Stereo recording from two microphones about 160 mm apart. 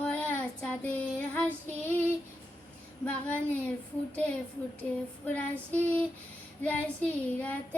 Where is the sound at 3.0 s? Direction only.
10° left (ahead or behind).